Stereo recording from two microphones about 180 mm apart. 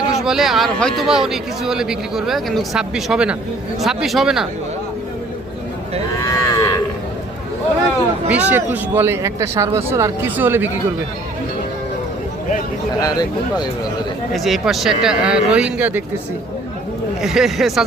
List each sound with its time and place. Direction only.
0.1 s a man's voice: centre (ahead or behind)
6.2 s livestock: 20° left (ahead or behind)
8.3 s speech: 10° right (ahead or behind)
13.0 s speech: 20° left (ahead or behind)
14.3 s a man's voice: centre (ahead or behind)
17.2 s a man's voice: centre (ahead or behind)